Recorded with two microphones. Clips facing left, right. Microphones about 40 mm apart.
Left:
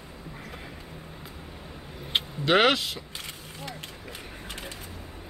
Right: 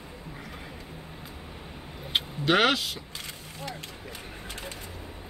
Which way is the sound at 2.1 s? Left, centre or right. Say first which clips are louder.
Left 1 dB; centre.